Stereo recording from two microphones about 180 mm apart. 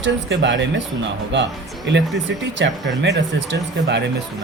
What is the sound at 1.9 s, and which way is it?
Speech, 85° right.